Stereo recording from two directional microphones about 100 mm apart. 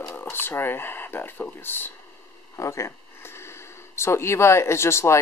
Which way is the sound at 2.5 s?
30° left (ahead or behind).